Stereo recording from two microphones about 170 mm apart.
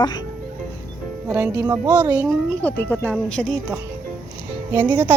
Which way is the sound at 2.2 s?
10° left (ahead or behind).